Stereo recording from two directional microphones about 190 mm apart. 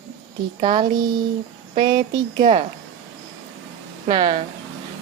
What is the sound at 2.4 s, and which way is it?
Speech, 40° right (ahead or behind).